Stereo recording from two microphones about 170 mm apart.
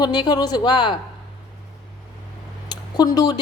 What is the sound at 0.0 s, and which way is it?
Speech, 25° left (ahead or behind).